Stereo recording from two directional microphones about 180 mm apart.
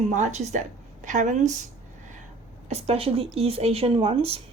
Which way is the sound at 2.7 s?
35° right (ahead or behind).